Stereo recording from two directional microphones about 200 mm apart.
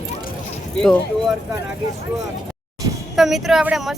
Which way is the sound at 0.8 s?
5° left (ahead or behind).